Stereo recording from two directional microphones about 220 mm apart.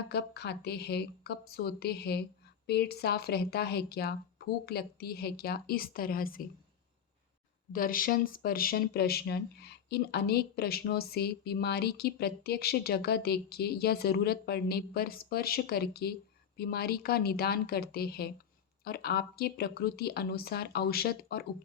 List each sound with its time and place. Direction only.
0.1 s speech: 45° left (ahead or behind)
7.7 s speech: 40° left (ahead or behind)